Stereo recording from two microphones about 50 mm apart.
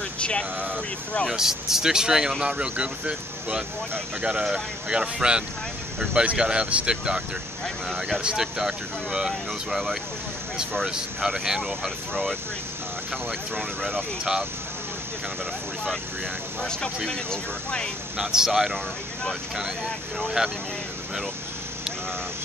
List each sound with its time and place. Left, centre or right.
0.2 s speech: centre
1.3 s speech: centre
7.6 s speech: centre
8.2 s speech: centre
11.4 s speech: centre
17.1 s speech: centre
18.1 s speech: centre
20.4 s speech: centre